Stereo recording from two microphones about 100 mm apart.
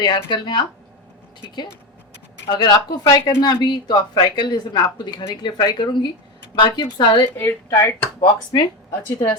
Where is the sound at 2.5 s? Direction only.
45° left (ahead or behind).